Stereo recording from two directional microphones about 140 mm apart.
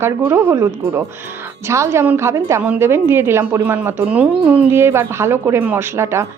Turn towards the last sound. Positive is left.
turn(degrees=-20)  # may be behind; listen again after turning